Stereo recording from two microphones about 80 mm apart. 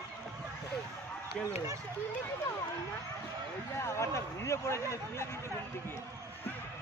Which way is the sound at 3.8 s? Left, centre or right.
Left.